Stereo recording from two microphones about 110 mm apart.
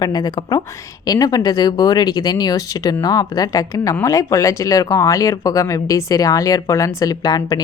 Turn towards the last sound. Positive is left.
turn(degrees=35)  # may be behind; listen again after turning